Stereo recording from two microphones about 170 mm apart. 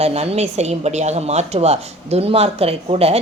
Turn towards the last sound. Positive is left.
turn(degrees=-35)  # may be behind; listen again after turning